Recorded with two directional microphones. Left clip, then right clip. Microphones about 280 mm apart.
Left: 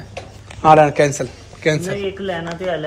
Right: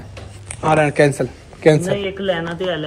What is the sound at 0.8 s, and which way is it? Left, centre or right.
A man's voice, centre.